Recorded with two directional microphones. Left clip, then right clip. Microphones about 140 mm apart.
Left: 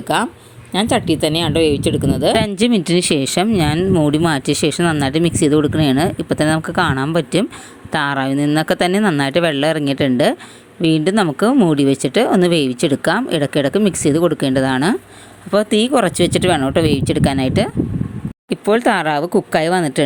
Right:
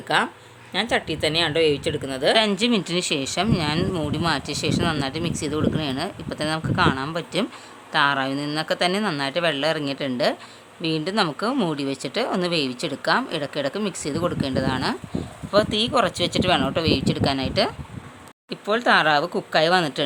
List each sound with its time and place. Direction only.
0.1 s speech: 40° left (ahead or behind)